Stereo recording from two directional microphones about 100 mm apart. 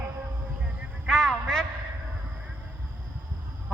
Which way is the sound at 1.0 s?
5° left (ahead or behind).